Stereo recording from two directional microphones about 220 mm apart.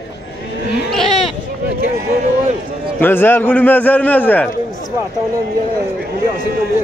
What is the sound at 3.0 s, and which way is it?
A man's voice, 10° left (ahead or behind).